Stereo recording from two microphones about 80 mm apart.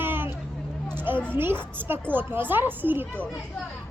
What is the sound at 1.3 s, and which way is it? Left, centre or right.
Speech, right.